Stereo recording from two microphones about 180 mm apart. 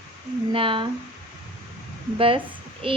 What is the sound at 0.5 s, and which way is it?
Speech, 30° right (ahead or behind).